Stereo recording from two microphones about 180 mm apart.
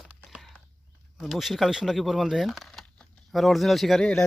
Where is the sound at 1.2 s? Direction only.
Centre (ahead or behind).